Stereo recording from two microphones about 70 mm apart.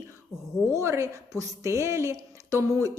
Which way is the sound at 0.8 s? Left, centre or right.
Right.